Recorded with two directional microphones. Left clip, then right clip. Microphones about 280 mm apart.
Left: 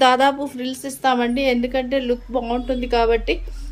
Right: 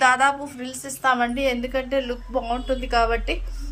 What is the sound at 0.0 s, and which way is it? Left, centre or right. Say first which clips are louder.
Speech: left 3 dB; centre.